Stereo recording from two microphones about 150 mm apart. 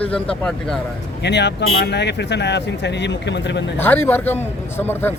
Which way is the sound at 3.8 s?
15° left (ahead or behind).